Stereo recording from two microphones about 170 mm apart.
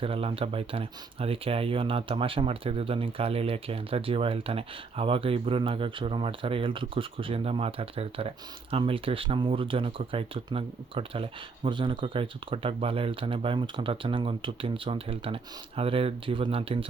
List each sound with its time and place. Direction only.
0.0 s speech: 35° right (ahead or behind)